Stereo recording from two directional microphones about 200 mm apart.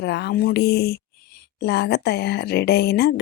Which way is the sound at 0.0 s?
60° left (ahead or behind).